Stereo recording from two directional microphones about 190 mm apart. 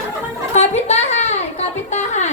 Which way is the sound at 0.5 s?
35° left (ahead or behind).